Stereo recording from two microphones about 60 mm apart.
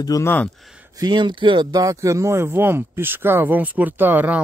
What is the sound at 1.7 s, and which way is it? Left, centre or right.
Speech, right.